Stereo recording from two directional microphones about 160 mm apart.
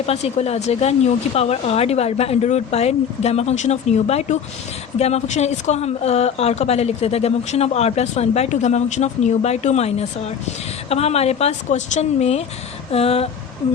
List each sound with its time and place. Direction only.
0.0 s a woman's voice: 40° left (ahead or behind)